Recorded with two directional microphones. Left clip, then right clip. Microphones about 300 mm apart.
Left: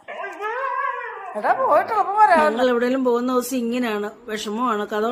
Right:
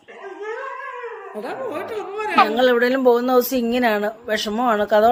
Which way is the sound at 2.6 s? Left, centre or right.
Centre.